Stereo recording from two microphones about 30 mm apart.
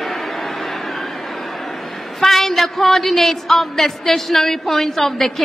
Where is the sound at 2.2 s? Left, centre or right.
Centre.